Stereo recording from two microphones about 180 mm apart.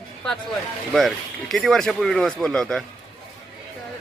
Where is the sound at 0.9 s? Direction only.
Centre (ahead or behind).